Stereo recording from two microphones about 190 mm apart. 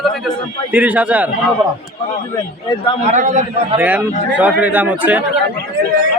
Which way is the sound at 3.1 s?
40° right (ahead or behind).